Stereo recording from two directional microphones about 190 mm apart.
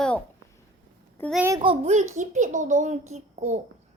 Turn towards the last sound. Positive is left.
turn(degrees=-35)  # may be behind; listen again after turning